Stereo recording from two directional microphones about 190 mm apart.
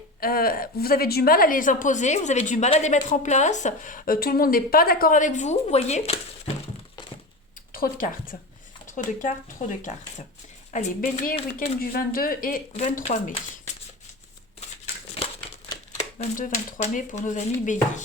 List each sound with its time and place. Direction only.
0.2 s a woman's voice: 50° left (ahead or behind); by 6.1 s 35° left (ahead or behind)
7.7 s a woman's voice: 50° left (ahead or behind)
16.0 s speech: 40° left (ahead or behind)